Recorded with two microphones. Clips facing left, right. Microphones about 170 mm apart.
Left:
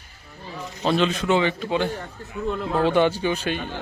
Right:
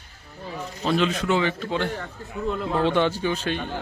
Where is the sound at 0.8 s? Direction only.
30° left (ahead or behind).